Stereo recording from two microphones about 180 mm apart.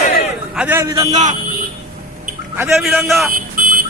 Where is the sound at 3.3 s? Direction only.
50° right (ahead or behind).